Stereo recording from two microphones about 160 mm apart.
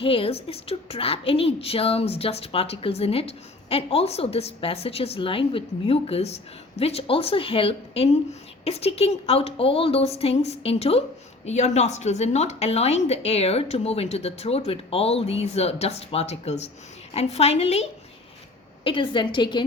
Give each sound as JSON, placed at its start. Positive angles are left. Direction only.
{"t": 0.0, "sound": "a woman's voice", "side_deg": 35}
{"t": 18.9, "sound": "a woman's voice", "side_deg": 30}